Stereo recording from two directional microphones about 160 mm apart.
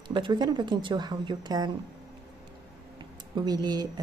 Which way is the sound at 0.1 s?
30° right (ahead or behind).